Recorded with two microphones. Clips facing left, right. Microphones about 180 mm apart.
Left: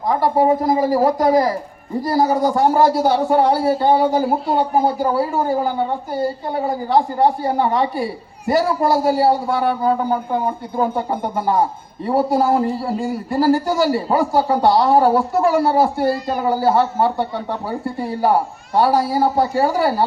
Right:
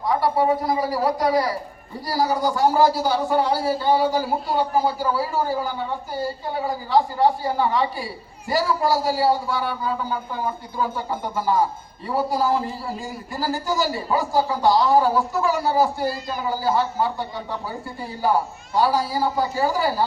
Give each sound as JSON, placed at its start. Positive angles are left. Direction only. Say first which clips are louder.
{"t": 0.0, "sound": "a man's voice", "louder": "left 4 dB", "side_deg": 45}
{"t": 2.6, "sound": "a man's voice", "louder": "left 2 dB", "side_deg": 55}